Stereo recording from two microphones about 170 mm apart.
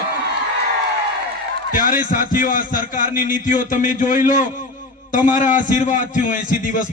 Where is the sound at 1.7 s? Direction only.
55° left (ahead or behind).